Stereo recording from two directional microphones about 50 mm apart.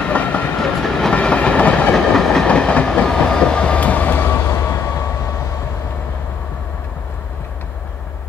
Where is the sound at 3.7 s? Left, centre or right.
Left.